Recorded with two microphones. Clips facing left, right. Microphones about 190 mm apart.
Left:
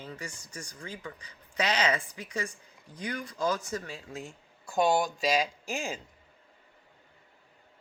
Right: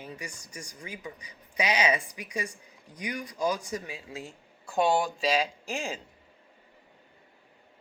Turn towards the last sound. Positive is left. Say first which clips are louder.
# right 1 dB
turn(degrees=5)  # may be behind; listen again after turning